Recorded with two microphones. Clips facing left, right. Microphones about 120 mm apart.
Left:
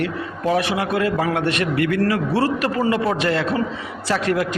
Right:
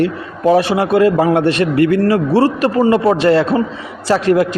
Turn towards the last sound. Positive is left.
turn(degrees=-35)  # may be behind; listen again after turning